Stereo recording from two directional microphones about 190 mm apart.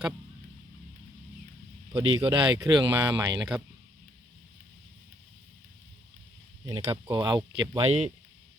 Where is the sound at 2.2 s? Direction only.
25° right (ahead or behind).